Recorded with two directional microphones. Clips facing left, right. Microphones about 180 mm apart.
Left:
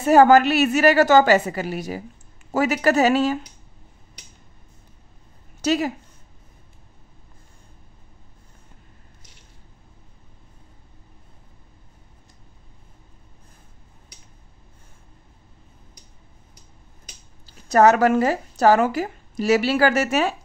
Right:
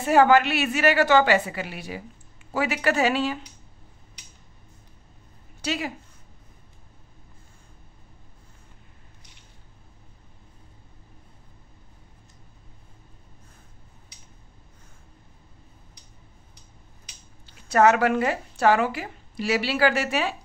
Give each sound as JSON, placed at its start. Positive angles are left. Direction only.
{"t": 0.0, "sound": "a woman's voice", "side_deg": 40}
{"t": 5.6, "sound": "a woman's voice", "side_deg": 40}
{"t": 17.5, "sound": "speech", "side_deg": 40}